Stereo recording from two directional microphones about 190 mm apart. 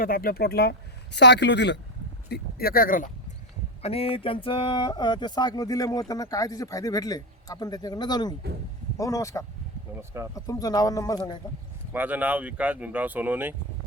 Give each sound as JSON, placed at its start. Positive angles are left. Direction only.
{"t": 0.0, "sound": "speech", "side_deg": 50}
{"t": 2.3, "sound": "speech", "side_deg": 50}
{"t": 3.8, "sound": "speech", "side_deg": 30}
{"t": 9.9, "sound": "speech", "side_deg": -15}
{"t": 10.3, "sound": "speech", "side_deg": 20}
{"t": 11.9, "sound": "speech", "side_deg": -10}